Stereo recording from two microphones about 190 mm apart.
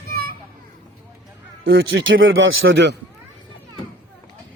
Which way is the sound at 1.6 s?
60° right (ahead or behind).